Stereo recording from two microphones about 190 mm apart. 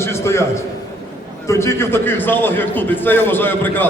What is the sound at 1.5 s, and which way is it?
A man's voice, 15° left (ahead or behind).